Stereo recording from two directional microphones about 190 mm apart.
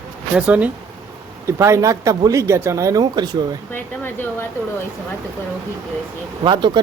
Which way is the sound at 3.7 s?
10° left (ahead or behind).